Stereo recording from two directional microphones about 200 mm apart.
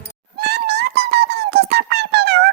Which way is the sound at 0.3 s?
55° right (ahead or behind).